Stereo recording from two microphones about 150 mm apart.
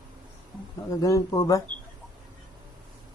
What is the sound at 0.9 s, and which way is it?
Speech, 20° left (ahead or behind).